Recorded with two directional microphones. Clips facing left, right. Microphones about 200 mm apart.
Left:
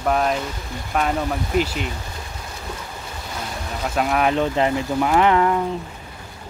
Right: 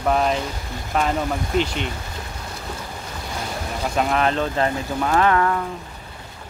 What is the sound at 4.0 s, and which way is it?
Speech, 5° left (ahead or behind).